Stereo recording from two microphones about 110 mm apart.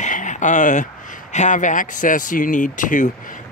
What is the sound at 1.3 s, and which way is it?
Speech, 90° left.